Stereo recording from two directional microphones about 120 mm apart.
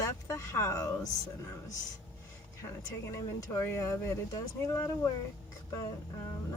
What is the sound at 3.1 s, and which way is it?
Speech, 20° left (ahead or behind).